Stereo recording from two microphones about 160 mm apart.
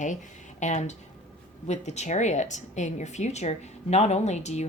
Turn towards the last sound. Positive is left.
turn(degrees=45)  # may be behind; listen again after turning